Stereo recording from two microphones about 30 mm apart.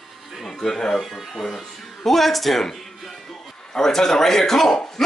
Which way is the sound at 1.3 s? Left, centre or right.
Centre.